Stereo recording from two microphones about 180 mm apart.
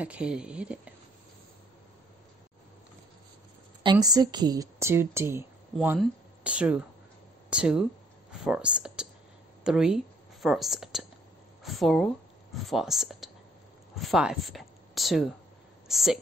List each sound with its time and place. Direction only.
0.0 s speech: 5° right (ahead or behind)
3.8 s a woman's voice: 20° right (ahead or behind); by 16.2 s centre (ahead or behind)